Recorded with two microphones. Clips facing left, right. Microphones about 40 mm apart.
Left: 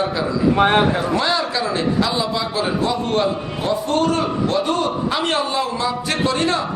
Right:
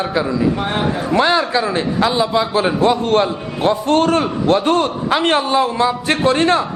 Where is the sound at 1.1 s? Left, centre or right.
Right.